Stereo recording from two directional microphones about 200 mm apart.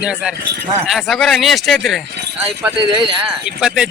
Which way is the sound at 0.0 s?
5° right (ahead or behind).